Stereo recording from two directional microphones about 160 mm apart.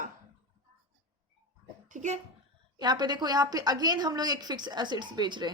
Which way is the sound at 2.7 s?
25° right (ahead or behind).